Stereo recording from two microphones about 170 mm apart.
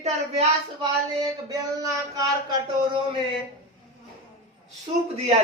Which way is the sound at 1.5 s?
20° right (ahead or behind).